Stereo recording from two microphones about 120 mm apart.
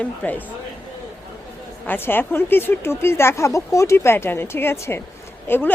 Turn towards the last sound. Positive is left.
turn(degrees=20)  # may be behind; listen again after turning